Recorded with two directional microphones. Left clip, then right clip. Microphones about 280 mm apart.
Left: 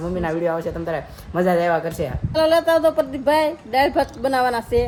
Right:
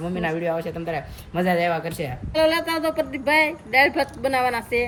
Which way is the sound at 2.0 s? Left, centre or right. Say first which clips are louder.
Left 1 dB; centre.